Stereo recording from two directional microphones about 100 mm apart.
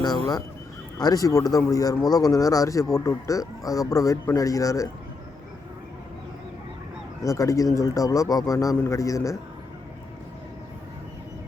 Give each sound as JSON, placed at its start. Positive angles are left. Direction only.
{"t": 0.9, "sound": "speech", "side_deg": 40}
{"t": 7.2, "sound": "speech", "side_deg": 35}